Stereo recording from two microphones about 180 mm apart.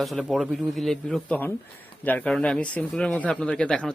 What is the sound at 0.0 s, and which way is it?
Speech, centre (ahead or behind).